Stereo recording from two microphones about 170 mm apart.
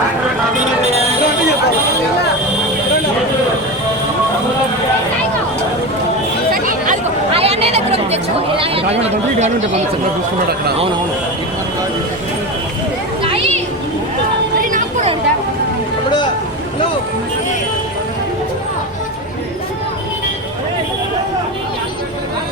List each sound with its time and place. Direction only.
6.5 s chatter: 50° right (ahead or behind)
7.3 s chatter: 35° right (ahead or behind)
14.6 s a sound: 50° right (ahead or behind)